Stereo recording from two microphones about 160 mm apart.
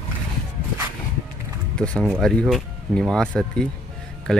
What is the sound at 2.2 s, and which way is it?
Speech, centre (ahead or behind).